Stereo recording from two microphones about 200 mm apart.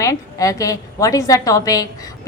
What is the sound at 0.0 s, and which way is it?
A woman's voice, 15° left (ahead or behind).